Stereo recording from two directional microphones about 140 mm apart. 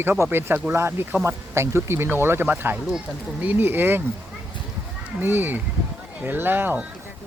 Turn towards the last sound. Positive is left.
turn(degrees=-15)  # may be behind; listen again after turning